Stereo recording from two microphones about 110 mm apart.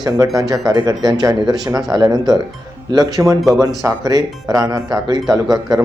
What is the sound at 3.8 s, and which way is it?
Speech, 30° right (ahead or behind).